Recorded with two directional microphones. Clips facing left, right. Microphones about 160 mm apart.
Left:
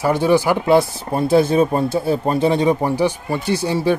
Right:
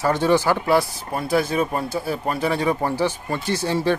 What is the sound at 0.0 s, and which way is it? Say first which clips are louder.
Speech: left 3 dB; 10° left (ahead or behind).